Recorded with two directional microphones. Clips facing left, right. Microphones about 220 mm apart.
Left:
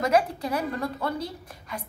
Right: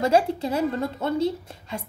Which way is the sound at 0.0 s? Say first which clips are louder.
Right 3 dB; 25° right (ahead or behind).